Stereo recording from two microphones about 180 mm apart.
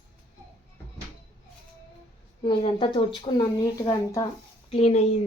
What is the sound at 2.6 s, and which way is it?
Speech, 30° left (ahead or behind).